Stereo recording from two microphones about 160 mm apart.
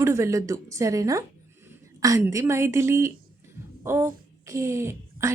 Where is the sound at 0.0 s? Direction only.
20° right (ahead or behind).